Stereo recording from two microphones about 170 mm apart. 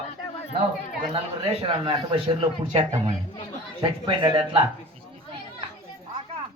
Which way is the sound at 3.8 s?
30° right (ahead or behind).